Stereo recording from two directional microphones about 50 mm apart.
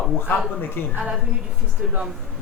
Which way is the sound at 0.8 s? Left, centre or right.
Left.